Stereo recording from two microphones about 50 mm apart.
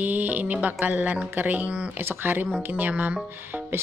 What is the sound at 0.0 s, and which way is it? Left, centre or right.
Speech, right.